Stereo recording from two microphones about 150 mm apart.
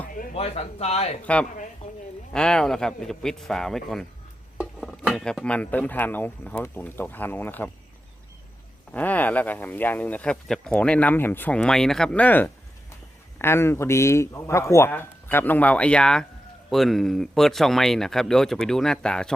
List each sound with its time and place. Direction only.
0.3 s speech: 45° left (ahead or behind)
1.2 s speech: 10° left (ahead or behind)
8.9 s speech: 10° left (ahead or behind)